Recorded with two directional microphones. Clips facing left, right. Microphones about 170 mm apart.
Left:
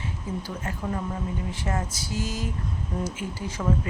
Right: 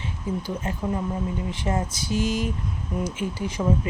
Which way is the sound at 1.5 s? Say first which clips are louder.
Right 3 dB; 20° right (ahead or behind).